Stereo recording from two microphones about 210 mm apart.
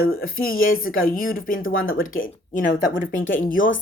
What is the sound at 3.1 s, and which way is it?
Speech, 65° left (ahead or behind).